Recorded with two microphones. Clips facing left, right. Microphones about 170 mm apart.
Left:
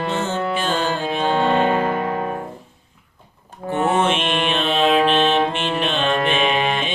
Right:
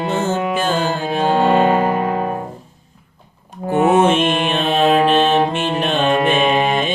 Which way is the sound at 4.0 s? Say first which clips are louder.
Right 5 dB; 45° right (ahead or behind).